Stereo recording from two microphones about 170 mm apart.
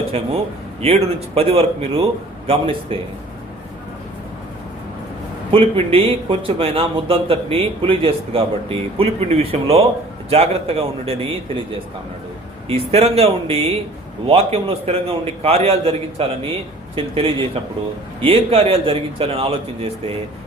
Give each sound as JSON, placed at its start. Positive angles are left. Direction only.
{"t": 0.1, "sound": "speech", "side_deg": -35}
{"t": 5.5, "sound": "speech", "side_deg": -30}
{"t": 12.6, "sound": "speech", "side_deg": -35}